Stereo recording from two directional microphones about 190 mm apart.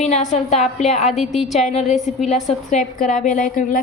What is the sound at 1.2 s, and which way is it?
Speech, centre (ahead or behind).